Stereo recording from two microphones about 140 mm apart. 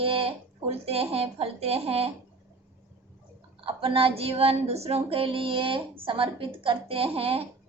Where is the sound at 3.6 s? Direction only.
40° right (ahead or behind).